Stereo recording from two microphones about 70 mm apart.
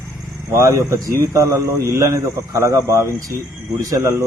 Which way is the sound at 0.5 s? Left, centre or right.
Right.